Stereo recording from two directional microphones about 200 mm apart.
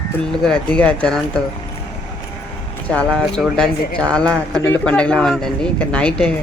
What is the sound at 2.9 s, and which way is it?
Speech, 5° left (ahead or behind).